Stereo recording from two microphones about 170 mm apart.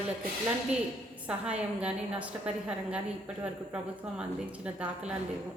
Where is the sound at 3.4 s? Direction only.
5° right (ahead or behind).